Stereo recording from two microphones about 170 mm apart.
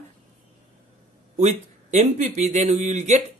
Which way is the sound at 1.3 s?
40° right (ahead or behind).